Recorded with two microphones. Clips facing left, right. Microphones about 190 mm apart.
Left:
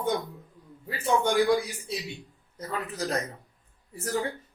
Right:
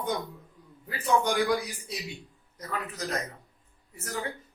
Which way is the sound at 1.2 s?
25° left (ahead or behind).